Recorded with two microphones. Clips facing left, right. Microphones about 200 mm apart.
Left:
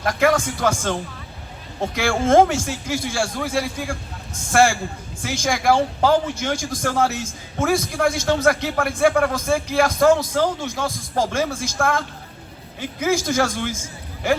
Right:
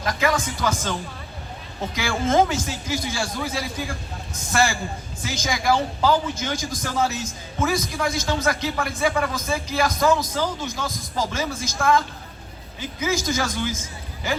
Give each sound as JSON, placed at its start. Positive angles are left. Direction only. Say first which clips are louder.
{"t": 0.0, "sound": "a man's voice", "louder": "left 5 dB", "side_deg": 60}
{"t": 2.0, "sound": "a man's voice", "louder": "left 5 dB", "side_deg": 60}